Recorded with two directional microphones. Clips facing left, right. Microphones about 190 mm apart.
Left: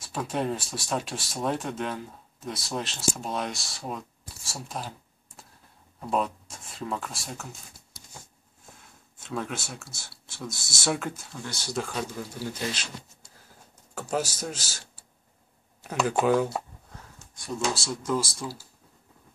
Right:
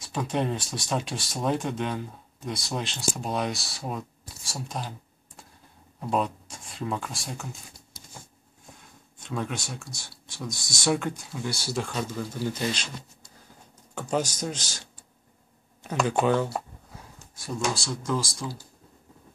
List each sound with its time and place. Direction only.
0.0 s speech: 5° left (ahead or behind)
8.7 s speech: centre (ahead or behind)
11.7 s speech: 5° left (ahead or behind)
13.9 s speech: 5° left (ahead or behind)